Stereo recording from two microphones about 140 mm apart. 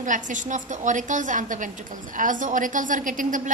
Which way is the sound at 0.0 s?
65° right (ahead or behind).